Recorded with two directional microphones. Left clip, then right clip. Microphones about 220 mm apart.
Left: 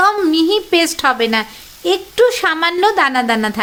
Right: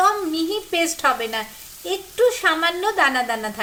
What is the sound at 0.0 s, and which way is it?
A woman's voice, 50° left (ahead or behind).